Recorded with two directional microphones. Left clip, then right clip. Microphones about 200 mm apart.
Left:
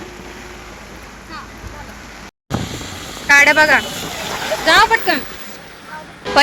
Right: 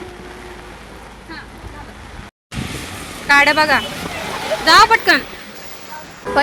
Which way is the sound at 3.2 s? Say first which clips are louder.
Left 2 dB; 15° right (ahead or behind).